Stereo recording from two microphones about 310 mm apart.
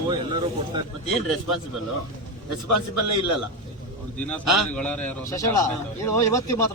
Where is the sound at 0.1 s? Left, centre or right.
Centre.